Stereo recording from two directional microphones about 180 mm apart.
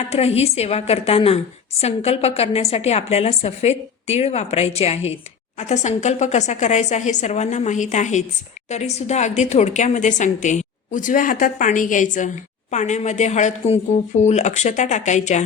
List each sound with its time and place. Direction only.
0.1 s a woman's voice: 35° left (ahead or behind)